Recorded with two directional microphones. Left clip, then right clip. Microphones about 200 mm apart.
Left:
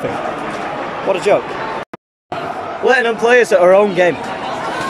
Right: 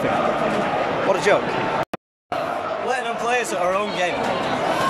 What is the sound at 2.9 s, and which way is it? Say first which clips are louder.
Speech: left 12 dB; 45° left (ahead or behind).